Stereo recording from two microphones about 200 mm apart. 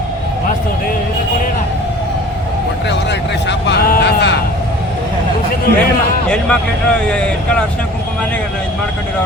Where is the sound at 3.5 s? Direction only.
60° left (ahead or behind).